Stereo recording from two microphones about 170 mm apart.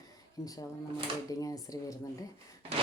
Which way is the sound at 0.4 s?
20° left (ahead or behind).